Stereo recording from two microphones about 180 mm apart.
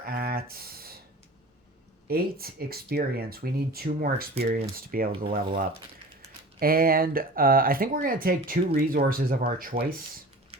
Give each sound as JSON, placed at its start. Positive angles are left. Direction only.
{"t": 0.0, "sound": "a sound", "side_deg": -60}
{"t": 2.0, "sound": "speech", "side_deg": -55}
{"t": 6.6, "sound": "speech", "side_deg": -55}